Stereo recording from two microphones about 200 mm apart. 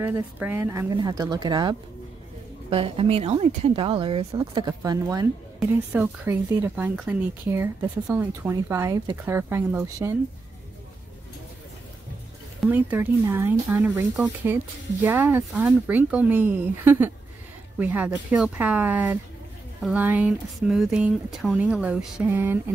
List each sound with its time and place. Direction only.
0.0 s speech: 10° right (ahead or behind)
12.9 s speech: 10° right (ahead or behind)